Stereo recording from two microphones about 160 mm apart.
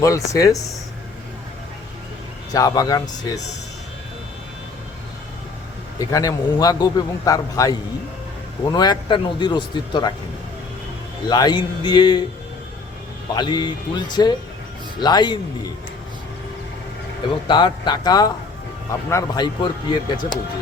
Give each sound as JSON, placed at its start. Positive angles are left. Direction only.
{"t": 0.0, "sound": "a man's voice", "side_deg": 20}
{"t": 2.5, "sound": "a man's voice", "side_deg": 25}
{"t": 6.0, "sound": "a man's voice", "side_deg": 20}
{"t": 11.3, "sound": "a man's voice", "side_deg": 25}
{"t": 13.3, "sound": "a man's voice", "side_deg": 30}
{"t": 17.5, "sound": "a man's voice", "side_deg": 25}